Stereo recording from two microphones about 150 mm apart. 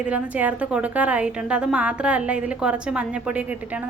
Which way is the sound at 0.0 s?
10° right (ahead or behind).